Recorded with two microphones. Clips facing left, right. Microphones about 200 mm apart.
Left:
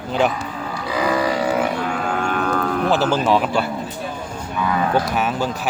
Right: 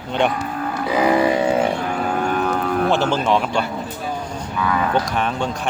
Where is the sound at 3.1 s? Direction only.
5° left (ahead or behind).